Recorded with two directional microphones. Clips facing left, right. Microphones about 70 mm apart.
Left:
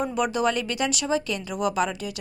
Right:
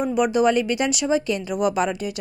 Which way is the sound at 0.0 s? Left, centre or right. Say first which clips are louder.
Right 5 dB; centre.